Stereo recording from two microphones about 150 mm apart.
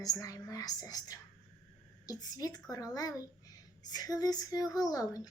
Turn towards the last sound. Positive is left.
turn(degrees=25)  # may be behind; listen again after turning